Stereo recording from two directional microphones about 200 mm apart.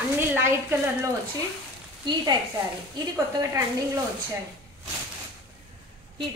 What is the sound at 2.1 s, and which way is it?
Speech, 25° right (ahead or behind).